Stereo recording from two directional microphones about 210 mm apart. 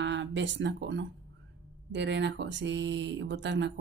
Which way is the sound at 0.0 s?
60° right (ahead or behind).